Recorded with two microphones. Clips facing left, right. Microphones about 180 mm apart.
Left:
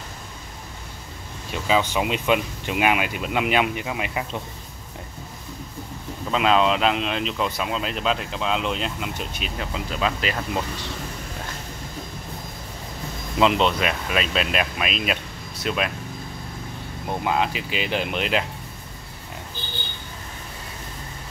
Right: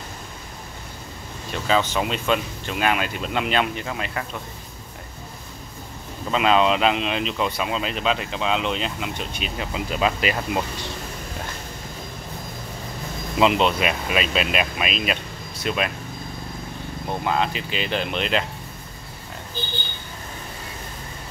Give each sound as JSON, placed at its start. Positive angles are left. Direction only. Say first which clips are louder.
{"t": 1.5, "sound": "speech", "louder": "even", "side_deg": 10}
{"t": 6.3, "sound": "speech", "louder": "right 1 dB", "side_deg": 0}
{"t": 9.9, "sound": "speech", "louder": "right 3 dB", "side_deg": -10}
{"t": 13.4, "sound": "speech", "louder": "right 1 dB", "side_deg": -5}
{"t": 17.1, "sound": "speech", "louder": "even", "side_deg": 10}